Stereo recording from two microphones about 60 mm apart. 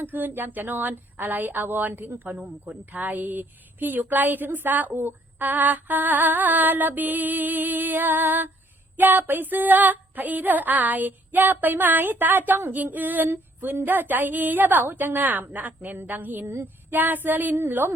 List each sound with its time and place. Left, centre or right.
0.0 s speech: right